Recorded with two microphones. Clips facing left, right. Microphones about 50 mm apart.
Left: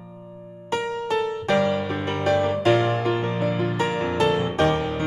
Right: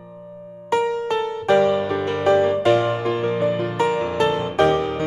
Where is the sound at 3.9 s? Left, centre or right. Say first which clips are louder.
Right 2 dB; left.